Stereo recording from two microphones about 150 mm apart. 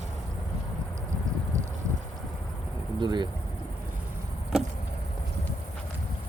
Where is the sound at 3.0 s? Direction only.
30° right (ahead or behind).